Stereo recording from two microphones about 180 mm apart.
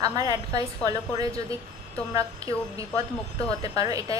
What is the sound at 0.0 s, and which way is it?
A woman's voice, 20° right (ahead or behind).